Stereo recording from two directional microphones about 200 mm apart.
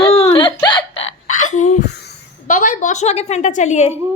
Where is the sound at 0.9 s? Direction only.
75° left (ahead or behind).